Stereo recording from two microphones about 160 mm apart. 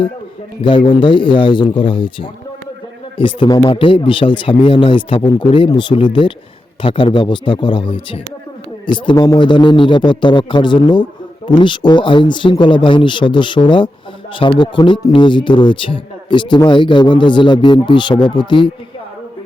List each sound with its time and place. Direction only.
0.6 s a man's voice: 30° left (ahead or behind)